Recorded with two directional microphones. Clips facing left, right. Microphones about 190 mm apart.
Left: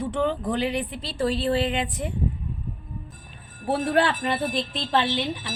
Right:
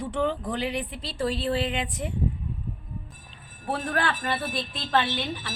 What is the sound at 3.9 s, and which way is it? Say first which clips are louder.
Speech: left 5 dB; 25° left (ahead or behind).